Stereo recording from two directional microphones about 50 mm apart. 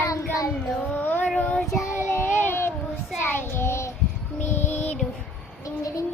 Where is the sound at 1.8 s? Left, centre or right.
Left.